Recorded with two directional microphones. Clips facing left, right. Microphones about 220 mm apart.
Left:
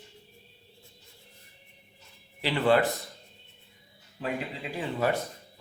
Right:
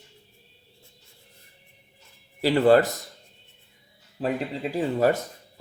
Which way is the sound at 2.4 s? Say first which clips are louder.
Right 6 dB; 40° right (ahead or behind).